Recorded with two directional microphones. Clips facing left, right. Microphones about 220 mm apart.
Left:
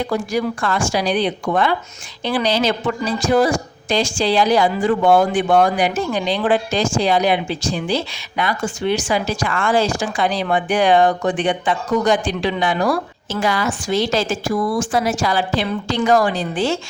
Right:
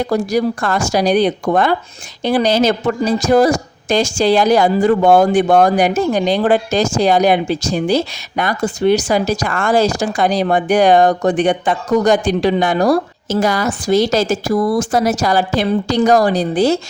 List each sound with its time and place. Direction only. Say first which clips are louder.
0.1 s a woman's voice: right 5 dB; 40° right (ahead or behind)